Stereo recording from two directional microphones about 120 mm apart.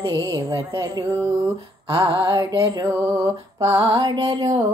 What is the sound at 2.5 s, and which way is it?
A woman's voice, 35° right (ahead or behind).